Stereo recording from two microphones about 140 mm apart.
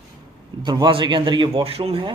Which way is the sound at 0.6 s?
35° right (ahead or behind).